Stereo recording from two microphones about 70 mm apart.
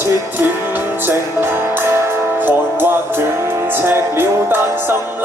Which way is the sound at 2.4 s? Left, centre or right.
Right.